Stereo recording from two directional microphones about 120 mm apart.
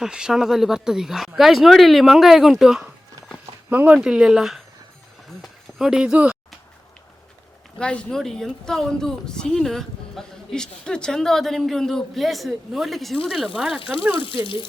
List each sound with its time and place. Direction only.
0.0 s speech: 5° right (ahead or behind)
7.8 s speech: 10° left (ahead or behind)
14.3 s speech: 45° left (ahead or behind)